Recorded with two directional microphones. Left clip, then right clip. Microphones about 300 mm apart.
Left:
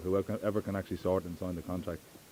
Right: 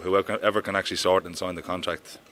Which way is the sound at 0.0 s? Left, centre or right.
Centre.